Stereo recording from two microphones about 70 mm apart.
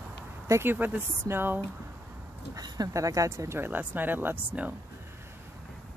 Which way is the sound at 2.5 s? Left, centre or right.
Right.